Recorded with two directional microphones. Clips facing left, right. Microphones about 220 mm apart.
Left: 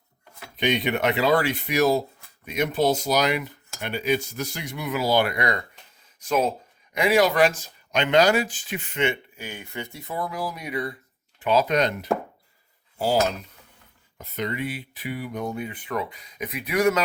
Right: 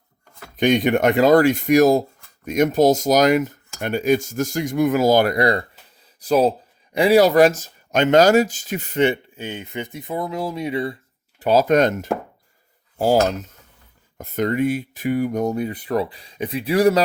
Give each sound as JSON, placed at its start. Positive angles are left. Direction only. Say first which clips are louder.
{"t": 0.5, "sound": "speech", "louder": "right 7 dB", "side_deg": -45}
{"t": 9.4, "sound": "speech", "louder": "right 6 dB", "side_deg": -20}
{"t": 11.3, "sound": "speech", "louder": "right 6 dB", "side_deg": -40}